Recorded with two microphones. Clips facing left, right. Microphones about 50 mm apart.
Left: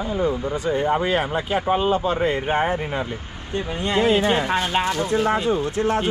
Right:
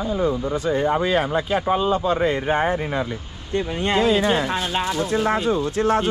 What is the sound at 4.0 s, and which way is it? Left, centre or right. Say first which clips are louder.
Speech: left 1 dB; left.